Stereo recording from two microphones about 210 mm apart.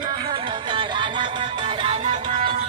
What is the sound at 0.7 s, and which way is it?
Music, 20° right (ahead or behind).